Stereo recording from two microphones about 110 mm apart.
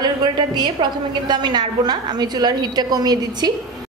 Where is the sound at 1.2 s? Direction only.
40° right (ahead or behind).